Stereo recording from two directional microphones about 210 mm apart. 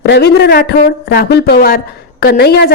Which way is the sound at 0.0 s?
50° left (ahead or behind).